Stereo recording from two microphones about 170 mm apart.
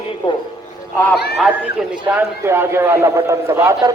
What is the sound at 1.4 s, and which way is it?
A man's voice, 10° right (ahead or behind).